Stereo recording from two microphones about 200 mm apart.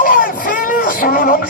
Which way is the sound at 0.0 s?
45° left (ahead or behind).